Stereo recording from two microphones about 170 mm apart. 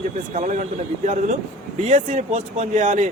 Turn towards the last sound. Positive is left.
turn(degrees=-45)  # may be behind; listen again after turning